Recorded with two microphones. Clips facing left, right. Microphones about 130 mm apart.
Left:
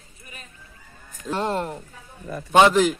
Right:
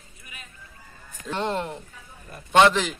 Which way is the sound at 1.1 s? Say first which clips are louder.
Left 3 dB; 40° left (ahead or behind).